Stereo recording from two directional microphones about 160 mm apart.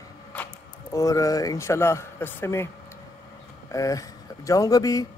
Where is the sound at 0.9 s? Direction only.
20° left (ahead or behind).